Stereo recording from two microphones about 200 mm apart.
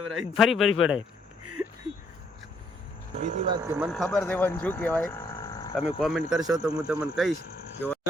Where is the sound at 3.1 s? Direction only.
35° right (ahead or behind).